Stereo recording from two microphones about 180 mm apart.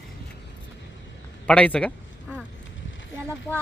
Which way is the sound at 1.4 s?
5° left (ahead or behind).